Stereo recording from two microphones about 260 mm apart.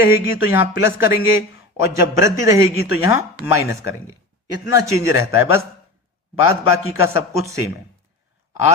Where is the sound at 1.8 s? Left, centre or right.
Centre.